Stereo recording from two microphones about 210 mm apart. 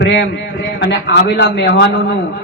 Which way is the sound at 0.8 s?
55° left (ahead or behind).